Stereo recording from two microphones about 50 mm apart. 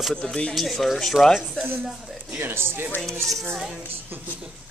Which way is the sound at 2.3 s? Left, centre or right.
Right.